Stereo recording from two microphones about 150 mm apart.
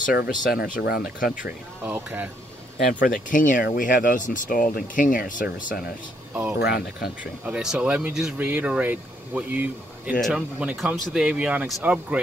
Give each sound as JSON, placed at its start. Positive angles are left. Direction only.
{"t": 0.0, "sound": "speech", "side_deg": 90}
{"t": 1.9, "sound": "speech", "side_deg": -10}
{"t": 2.9, "sound": "speech", "side_deg": 60}
{"t": 6.6, "sound": "speech", "side_deg": 90}
{"t": 7.4, "sound": "speech", "side_deg": -5}